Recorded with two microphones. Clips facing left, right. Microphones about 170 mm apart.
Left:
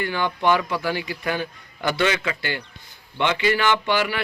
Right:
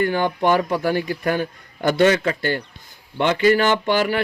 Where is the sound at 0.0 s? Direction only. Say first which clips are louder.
Right 4 dB; 45° right (ahead or behind).